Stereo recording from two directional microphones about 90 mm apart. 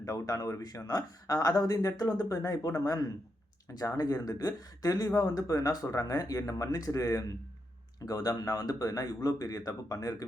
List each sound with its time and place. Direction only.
0.0 s a man's voice: 40° left (ahead or behind)